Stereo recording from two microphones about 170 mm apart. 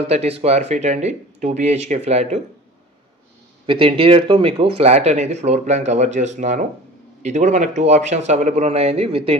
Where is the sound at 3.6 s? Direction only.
30° right (ahead or behind).